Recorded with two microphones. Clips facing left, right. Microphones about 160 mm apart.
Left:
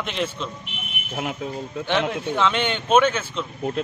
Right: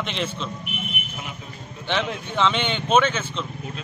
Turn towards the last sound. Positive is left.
turn(degrees=5)  # may be behind; listen again after turning